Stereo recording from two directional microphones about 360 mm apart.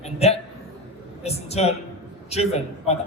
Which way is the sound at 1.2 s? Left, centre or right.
Centre.